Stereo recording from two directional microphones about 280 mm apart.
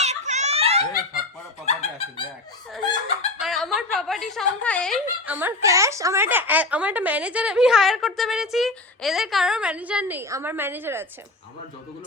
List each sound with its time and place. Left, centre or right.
0.0 s giggle: right
1.6 s speech: left
3.4 s a woman's voice: centre